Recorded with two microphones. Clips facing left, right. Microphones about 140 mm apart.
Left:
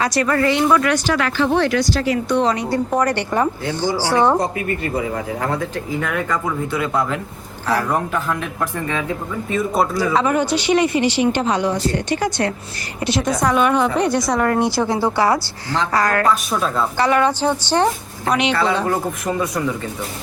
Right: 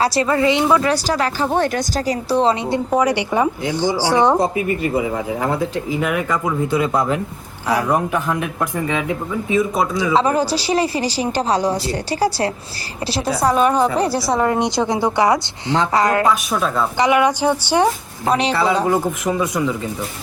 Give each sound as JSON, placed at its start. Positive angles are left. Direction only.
{"t": 0.0, "sound": "a woman's voice", "side_deg": -30}
{"t": 0.9, "sound": "speech", "side_deg": -35}
{"t": 2.9, "sound": "a woman's voice", "side_deg": -10}
{"t": 9.5, "sound": "speech", "side_deg": 0}
{"t": 10.1, "sound": "a woman's voice", "side_deg": -30}
{"t": 16.3, "sound": "speech", "side_deg": 0}
{"t": 17.0, "sound": "speech", "side_deg": -15}
{"t": 18.3, "sound": "speech", "side_deg": -35}
{"t": 18.5, "sound": "speech", "side_deg": -10}